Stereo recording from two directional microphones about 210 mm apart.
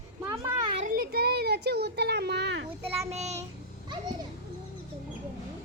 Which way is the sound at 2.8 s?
30° right (ahead or behind).